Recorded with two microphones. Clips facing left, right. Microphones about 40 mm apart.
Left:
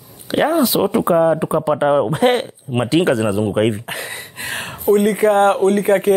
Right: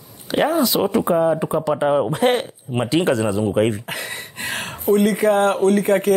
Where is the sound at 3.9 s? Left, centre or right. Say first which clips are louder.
Left 1 dB; centre.